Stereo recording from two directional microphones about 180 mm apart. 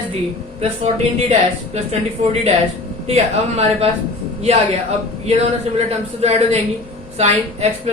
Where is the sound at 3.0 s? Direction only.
35° right (ahead or behind).